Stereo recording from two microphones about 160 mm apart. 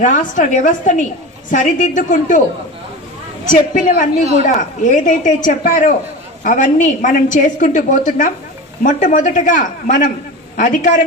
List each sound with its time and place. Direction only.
0.0 s a woman's voice: 55° left (ahead or behind)
3.5 s a woman's voice: 55° left (ahead or behind)